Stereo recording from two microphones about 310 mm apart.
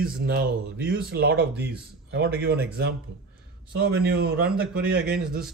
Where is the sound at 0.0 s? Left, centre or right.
Right.